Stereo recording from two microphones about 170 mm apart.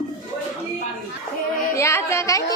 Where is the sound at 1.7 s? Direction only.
15° left (ahead or behind).